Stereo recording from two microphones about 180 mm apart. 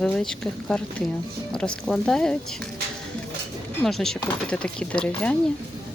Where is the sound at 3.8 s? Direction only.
Centre (ahead or behind).